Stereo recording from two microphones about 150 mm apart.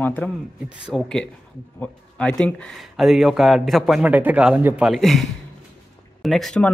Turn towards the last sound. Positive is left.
turn(degrees=5)  # may be behind; listen again after turning